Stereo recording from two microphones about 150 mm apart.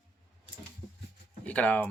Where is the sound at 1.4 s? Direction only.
10° left (ahead or behind).